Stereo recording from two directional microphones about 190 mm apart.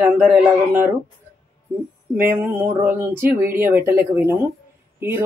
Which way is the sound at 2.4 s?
10° right (ahead or behind).